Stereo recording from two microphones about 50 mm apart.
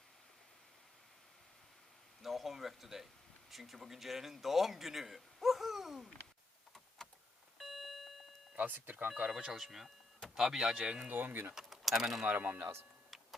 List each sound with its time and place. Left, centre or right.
2.2 s a man's voice: centre
7.6 s alarm clock: centre
8.5 s speech: right
9.3 s speech: centre
11.0 s speech: right
11.5 s speech: centre
12.2 s speech: right